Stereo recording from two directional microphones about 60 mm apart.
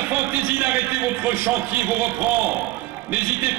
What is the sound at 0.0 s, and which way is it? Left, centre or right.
A man's voice, right.